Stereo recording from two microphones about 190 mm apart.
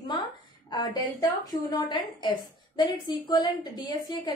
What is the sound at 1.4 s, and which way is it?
A woman's voice, 20° left (ahead or behind).